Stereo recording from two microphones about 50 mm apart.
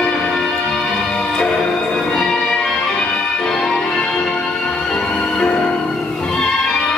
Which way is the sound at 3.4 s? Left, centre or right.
Centre.